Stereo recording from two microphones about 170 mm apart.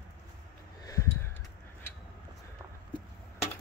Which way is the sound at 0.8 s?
20° left (ahead or behind).